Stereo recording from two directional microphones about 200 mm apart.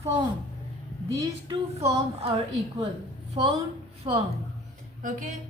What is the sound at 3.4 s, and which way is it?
Speech, 20° right (ahead or behind).